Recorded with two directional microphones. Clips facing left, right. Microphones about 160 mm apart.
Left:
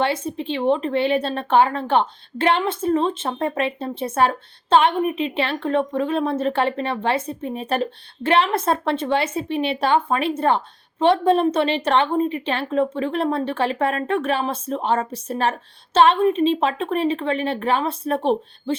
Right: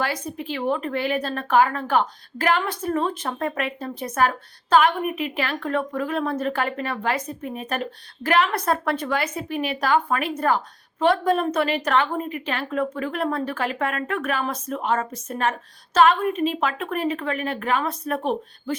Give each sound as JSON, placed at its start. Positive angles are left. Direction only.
{"t": 0.0, "sound": "speech", "side_deg": 25}